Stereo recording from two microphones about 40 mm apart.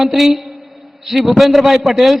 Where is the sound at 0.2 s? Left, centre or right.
Centre.